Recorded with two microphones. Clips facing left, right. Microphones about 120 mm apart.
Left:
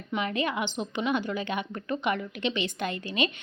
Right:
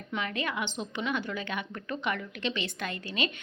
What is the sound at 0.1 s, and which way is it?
A woman's voice, 20° left (ahead or behind).